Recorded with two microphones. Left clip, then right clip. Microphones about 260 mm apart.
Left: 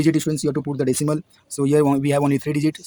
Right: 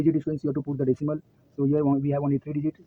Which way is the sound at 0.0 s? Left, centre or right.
Left.